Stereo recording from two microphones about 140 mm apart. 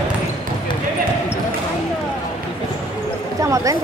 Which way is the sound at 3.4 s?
20° right (ahead or behind).